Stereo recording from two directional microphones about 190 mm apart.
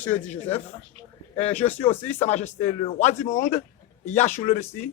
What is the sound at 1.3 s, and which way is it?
Speech, 35° left (ahead or behind).